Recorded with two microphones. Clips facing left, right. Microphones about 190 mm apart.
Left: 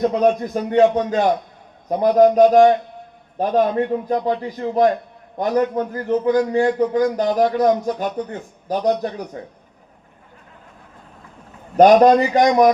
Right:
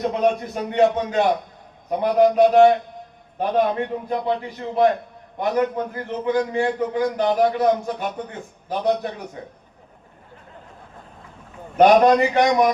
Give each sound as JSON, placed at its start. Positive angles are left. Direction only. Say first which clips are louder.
{"t": 0.2, "sound": "a man's voice", "louder": "left 3 dB", "side_deg": 40}
{"t": 11.8, "sound": "a man's voice", "louder": "left 3 dB", "side_deg": 40}